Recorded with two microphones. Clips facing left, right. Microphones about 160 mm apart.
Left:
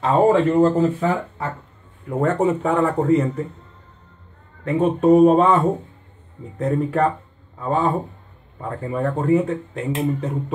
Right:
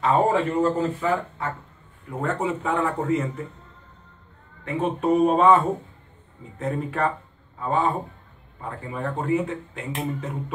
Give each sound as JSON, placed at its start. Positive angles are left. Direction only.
{"t": 0.0, "sound": "speech", "side_deg": 35}
{"t": 2.0, "sound": "speech", "side_deg": 45}
{"t": 4.6, "sound": "speech", "side_deg": 40}
{"t": 6.6, "sound": "speech", "side_deg": 40}
{"t": 8.6, "sound": "speech", "side_deg": 40}